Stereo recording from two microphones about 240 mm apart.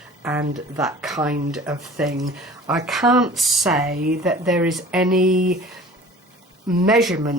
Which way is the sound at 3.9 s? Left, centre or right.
Right.